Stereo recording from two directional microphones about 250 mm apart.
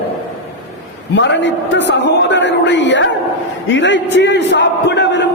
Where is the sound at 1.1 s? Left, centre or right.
Left.